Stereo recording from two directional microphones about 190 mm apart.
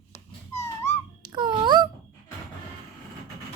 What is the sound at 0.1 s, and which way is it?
Dog, 15° left (ahead or behind).